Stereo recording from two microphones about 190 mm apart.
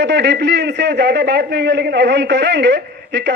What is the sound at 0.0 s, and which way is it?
A man's voice, 65° right (ahead or behind).